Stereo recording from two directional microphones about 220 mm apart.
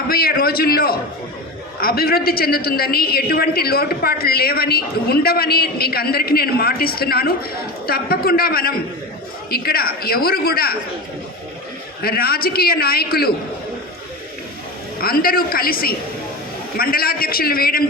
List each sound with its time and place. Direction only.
0.1 s a woman's voice: 45° left (ahead or behind)
12.0 s a woman's voice: 45° left (ahead or behind)
15.0 s a woman's voice: 45° left (ahead or behind)